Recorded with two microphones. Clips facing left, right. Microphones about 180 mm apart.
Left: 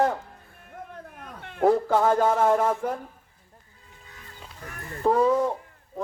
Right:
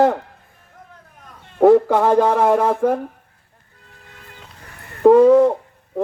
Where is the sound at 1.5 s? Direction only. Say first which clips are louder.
Right 8 dB; 90° right.